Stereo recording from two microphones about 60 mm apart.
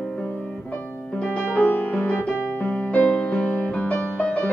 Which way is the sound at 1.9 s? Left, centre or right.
Left.